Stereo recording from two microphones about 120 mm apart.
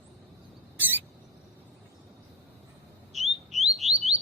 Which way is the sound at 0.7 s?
15° right (ahead or behind).